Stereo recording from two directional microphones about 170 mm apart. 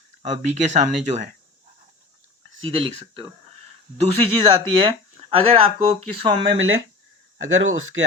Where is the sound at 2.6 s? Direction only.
30° right (ahead or behind).